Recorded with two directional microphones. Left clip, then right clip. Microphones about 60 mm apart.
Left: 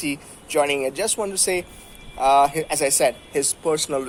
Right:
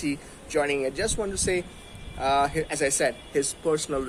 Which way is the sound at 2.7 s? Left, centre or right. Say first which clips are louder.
Left 5 dB; right.